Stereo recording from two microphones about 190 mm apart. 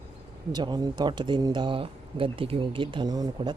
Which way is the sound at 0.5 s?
20° right (ahead or behind).